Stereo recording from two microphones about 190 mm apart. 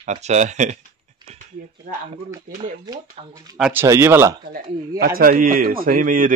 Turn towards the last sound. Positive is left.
turn(degrees=-45)  # may be behind; listen again after turning